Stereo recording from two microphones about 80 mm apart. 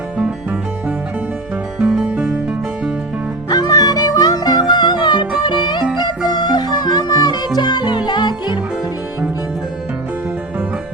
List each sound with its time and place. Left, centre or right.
1.8 s music: centre
3.5 s music: left
4.7 s music: left